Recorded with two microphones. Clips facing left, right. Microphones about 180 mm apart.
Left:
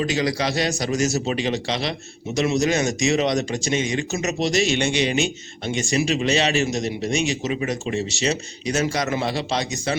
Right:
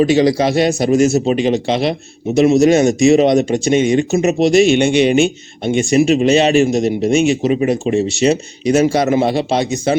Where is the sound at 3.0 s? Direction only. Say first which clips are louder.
Right 10 dB; 55° right (ahead or behind).